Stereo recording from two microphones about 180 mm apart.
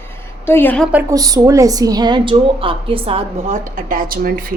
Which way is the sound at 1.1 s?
20° right (ahead or behind).